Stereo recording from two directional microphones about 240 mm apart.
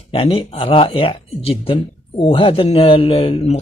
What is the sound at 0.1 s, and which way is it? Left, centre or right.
Speech, left.